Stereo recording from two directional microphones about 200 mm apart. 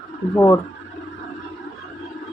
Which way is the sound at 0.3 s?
15° left (ahead or behind).